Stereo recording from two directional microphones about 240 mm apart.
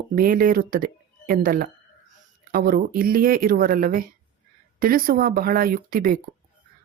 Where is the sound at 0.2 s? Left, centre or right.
Right.